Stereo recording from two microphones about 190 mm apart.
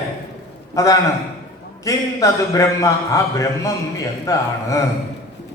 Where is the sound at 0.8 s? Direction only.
15° left (ahead or behind).